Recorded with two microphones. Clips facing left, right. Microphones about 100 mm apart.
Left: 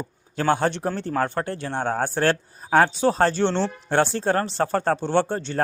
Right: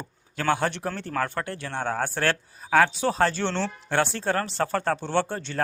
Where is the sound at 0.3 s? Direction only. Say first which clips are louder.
Left 3 dB; 30° left (ahead or behind).